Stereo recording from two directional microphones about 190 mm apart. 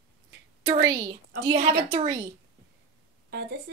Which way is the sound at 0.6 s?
20° right (ahead or behind).